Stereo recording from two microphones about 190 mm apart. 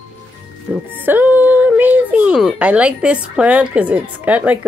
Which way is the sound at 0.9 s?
10° right (ahead or behind).